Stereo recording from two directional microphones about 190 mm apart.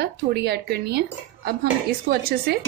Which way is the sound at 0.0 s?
55° right (ahead or behind).